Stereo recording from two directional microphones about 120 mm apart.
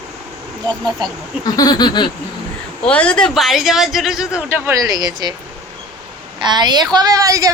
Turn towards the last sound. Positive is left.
turn(degrees=-30)  # may be behind; listen again after turning